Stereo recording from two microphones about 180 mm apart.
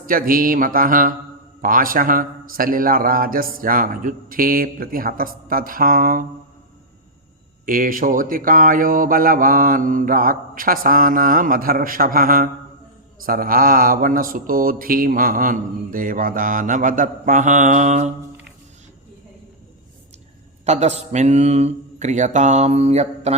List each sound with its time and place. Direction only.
0.0 s speech: 50° right (ahead or behind)
7.6 s speech: 50° right (ahead or behind)
20.7 s speech: 40° right (ahead or behind)